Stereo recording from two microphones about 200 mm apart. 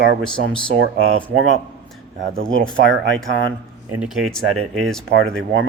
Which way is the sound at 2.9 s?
65° right (ahead or behind).